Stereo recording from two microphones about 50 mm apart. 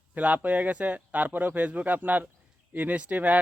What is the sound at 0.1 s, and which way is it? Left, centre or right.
Speech, right.